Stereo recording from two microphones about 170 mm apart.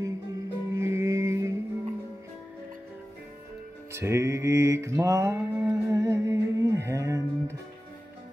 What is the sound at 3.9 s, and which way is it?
Mantra, 15° right (ahead or behind).